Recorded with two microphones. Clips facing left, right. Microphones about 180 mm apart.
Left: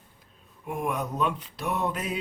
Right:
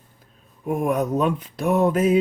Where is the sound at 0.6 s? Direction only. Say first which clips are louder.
Right 8 dB; 45° right (ahead or behind).